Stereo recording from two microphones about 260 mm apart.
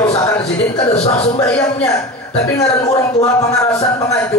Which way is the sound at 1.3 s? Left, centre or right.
Centre.